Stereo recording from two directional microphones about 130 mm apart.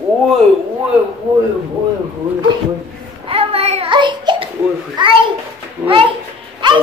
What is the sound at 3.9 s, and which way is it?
Child singing, 35° right (ahead or behind).